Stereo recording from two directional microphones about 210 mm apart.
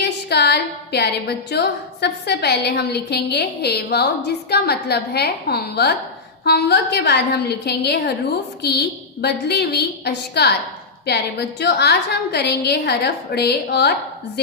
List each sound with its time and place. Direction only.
0.0 s a woman's voice: 50° left (ahead or behind)
9.2 s a woman's voice: 50° left (ahead or behind)